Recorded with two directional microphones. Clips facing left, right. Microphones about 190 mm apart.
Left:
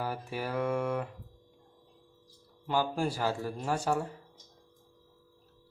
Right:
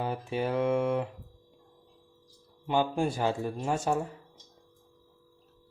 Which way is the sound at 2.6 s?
20° right (ahead or behind).